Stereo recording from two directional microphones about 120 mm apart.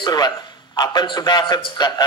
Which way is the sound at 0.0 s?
35° left (ahead or behind).